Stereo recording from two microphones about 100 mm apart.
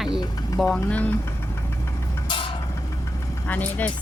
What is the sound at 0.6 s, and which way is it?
Speech, 10° left (ahead or behind).